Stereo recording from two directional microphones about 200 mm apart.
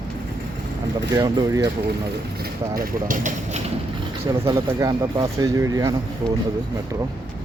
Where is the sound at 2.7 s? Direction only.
45° right (ahead or behind).